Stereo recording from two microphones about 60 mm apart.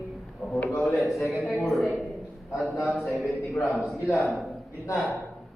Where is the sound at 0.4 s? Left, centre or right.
Right.